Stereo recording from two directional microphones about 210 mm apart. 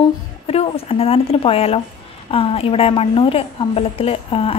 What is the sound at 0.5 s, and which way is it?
A woman's voice, 30° left (ahead or behind).